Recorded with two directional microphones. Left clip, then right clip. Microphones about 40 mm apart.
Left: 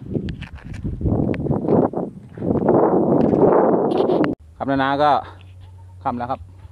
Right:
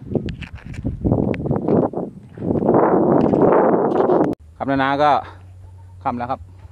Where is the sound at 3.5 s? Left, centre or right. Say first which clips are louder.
Right 1 dB; right.